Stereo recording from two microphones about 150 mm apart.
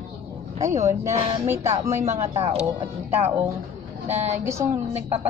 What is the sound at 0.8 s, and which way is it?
A woman's voice, 20° right (ahead or behind).